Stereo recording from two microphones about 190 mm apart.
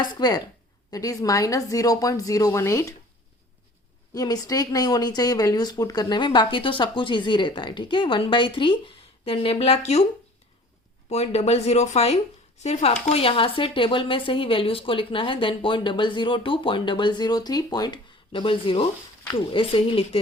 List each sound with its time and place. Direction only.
0.0 s speech: 20° left (ahead or behind)
4.1 s speech: 20° left (ahead or behind)
11.1 s speech: 35° left (ahead or behind)